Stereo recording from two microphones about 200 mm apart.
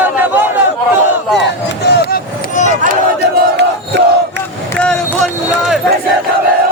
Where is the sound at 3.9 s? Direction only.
60° right (ahead or behind).